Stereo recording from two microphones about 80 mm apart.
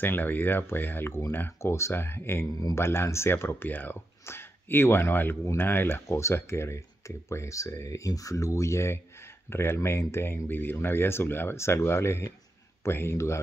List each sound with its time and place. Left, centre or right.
0.0 s speech: left